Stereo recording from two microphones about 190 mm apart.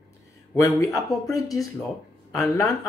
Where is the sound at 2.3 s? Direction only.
20° left (ahead or behind).